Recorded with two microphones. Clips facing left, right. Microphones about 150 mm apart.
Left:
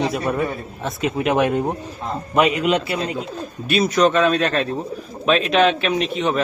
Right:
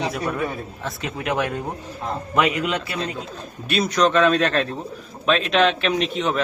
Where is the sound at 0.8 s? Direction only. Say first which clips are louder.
Left 7 dB; 25° left (ahead or behind).